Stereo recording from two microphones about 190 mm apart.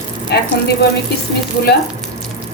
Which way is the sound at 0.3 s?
60° left (ahead or behind).